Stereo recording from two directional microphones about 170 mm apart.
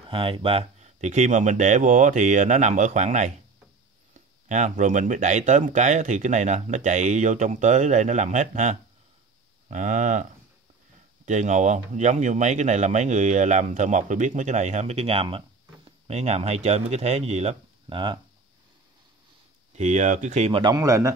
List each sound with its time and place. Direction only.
0.1 s speech: 30° right (ahead or behind)
4.5 s speech: 45° right (ahead or behind)
11.2 s speech: 45° right (ahead or behind); by 18.2 s 30° right (ahead or behind)
19.7 s speech: 40° right (ahead or behind); by 21.1 s 20° right (ahead or behind)